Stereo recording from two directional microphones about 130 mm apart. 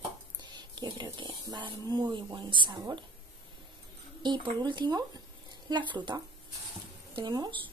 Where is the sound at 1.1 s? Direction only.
35° right (ahead or behind).